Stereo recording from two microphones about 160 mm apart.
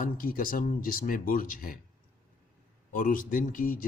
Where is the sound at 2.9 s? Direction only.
60° left (ahead or behind).